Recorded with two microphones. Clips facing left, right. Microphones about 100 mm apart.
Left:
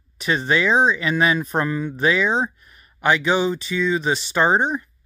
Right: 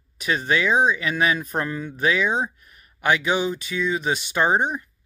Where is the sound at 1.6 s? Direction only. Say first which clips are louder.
Left 3 dB; 10° left (ahead or behind).